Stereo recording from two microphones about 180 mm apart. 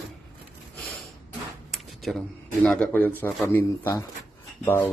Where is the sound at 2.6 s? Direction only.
5° left (ahead or behind).